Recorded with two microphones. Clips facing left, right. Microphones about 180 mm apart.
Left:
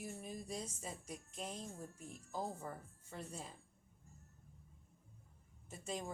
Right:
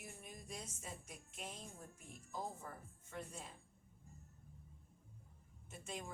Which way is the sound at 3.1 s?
35° left (ahead or behind).